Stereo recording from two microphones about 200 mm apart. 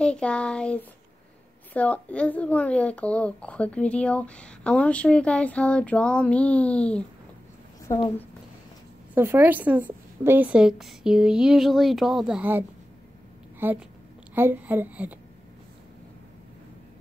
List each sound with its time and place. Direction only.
0.0 s a woman's voice: 5° left (ahead or behind)
7.9 s a woman's voice: 40° left (ahead or behind)
9.1 s a woman's voice: 10° right (ahead or behind)